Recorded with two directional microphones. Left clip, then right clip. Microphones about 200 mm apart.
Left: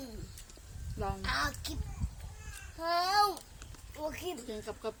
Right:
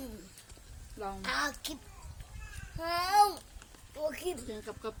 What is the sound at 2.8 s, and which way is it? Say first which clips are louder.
A child's voice: right 2 dB; 55° right (ahead or behind).